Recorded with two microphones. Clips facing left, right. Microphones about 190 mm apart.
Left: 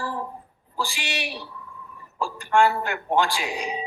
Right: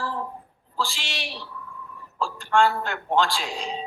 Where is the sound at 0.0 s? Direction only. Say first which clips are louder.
Even; 15° left (ahead or behind).